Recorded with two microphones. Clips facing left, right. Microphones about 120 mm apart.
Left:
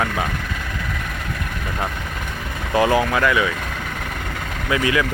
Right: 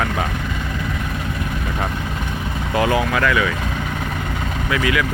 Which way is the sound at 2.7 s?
25° left (ahead or behind).